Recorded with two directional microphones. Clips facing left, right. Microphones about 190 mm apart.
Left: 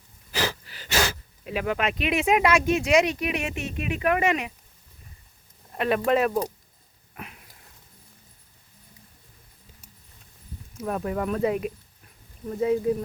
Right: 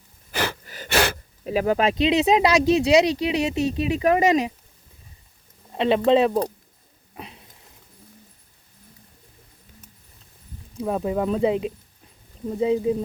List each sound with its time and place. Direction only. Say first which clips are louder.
0.3 s gasp: right 1 dB; 55° right (ahead or behind)
1.5 s speech: right 6 dB; 35° right (ahead or behind)
5.7 s speech: right 5 dB; 25° right (ahead or behind)
7.1 s a sound: right 2 dB; 25° right (ahead or behind)
10.8 s speech: right 4 dB; 20° right (ahead or behind)